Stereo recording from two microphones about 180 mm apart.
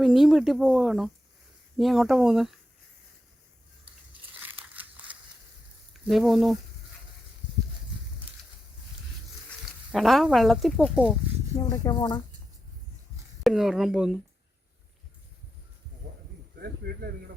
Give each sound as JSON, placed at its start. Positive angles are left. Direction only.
{"t": 0.0, "sound": "speech", "side_deg": 0}
{"t": 4.4, "sound": "crushing", "side_deg": -10}
{"t": 6.1, "sound": "speech", "side_deg": 0}
{"t": 9.9, "sound": "speech", "side_deg": 0}
{"t": 11.5, "sound": "speech", "side_deg": 15}
{"t": 13.4, "sound": "speech", "side_deg": 0}
{"t": 16.6, "sound": "speech", "side_deg": -60}